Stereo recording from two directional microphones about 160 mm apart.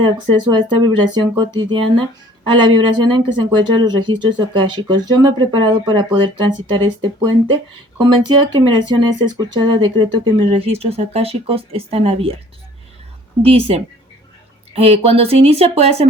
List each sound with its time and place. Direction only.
0.0 s speech: 30° right (ahead or behind)
13.4 s speech: 35° right (ahead or behind)